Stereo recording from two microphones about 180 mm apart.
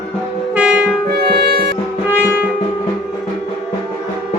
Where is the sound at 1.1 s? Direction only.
60° right (ahead or behind).